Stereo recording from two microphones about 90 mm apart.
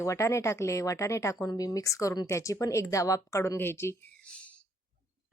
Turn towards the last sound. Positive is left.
turn(degrees=30)  # may be behind; listen again after turning